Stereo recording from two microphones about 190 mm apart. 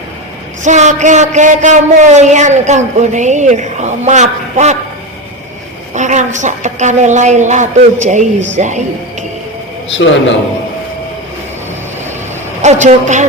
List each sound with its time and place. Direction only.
0.6 s a man's voice: 40° right (ahead or behind)
5.9 s a man's voice: 40° right (ahead or behind)
9.9 s a man's voice: 75° left (ahead or behind)
12.6 s a man's voice: 40° right (ahead or behind)